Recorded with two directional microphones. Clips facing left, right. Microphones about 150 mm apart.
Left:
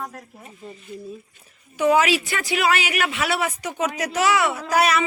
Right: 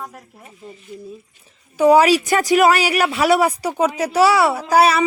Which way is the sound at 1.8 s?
35° right (ahead or behind).